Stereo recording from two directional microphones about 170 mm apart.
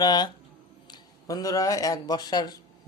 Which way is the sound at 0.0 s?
25° left (ahead or behind).